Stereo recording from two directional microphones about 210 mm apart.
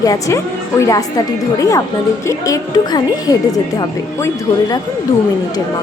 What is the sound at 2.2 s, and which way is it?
A woman's voice, 15° left (ahead or behind).